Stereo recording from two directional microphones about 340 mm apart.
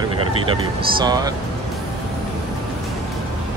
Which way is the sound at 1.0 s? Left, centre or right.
Centre.